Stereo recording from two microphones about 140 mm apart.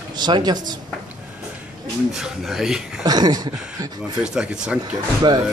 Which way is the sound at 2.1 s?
5° right (ahead or behind).